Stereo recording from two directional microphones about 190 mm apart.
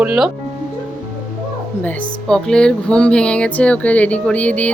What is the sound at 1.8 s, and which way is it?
Speech, 5° left (ahead or behind).